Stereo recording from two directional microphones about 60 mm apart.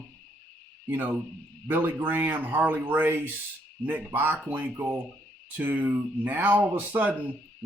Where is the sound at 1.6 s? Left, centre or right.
Right.